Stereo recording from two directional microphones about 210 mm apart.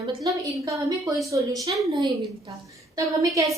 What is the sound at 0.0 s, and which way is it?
A woman's voice, 20° right (ahead or behind).